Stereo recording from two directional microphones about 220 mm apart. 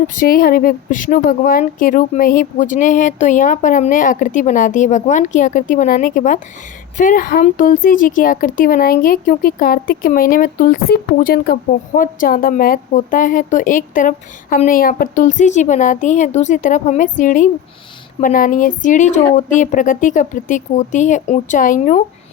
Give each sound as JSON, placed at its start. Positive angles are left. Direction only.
{"t": 0.2, "sound": "a woman's voice", "side_deg": 40}